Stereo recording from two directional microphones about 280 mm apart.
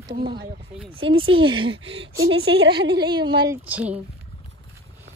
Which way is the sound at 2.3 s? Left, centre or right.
Right.